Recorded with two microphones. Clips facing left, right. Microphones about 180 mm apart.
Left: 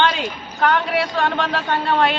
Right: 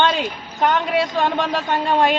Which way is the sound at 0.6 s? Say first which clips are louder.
Even; 20° right (ahead or behind).